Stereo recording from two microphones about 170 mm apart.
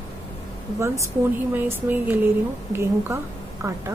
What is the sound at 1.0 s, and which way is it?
A woman's voice, 10° right (ahead or behind).